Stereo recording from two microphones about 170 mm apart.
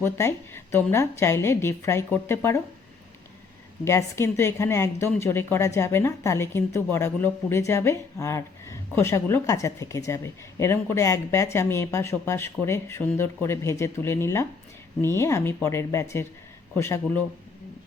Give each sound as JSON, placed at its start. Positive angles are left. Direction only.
{"t": 0.0, "sound": "speech", "side_deg": 15}
{"t": 3.8, "sound": "speech", "side_deg": 15}